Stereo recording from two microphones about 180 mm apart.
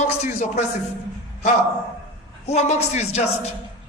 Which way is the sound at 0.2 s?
40° left (ahead or behind).